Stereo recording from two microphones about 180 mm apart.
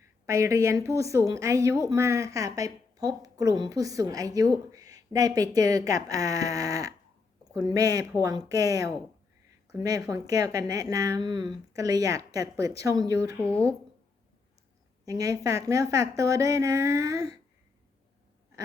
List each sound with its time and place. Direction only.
0.3 s a woman's voice: 15° right (ahead or behind)
13.4 s speech: 5° left (ahead or behind)
15.0 s a woman's voice: 20° right (ahead or behind)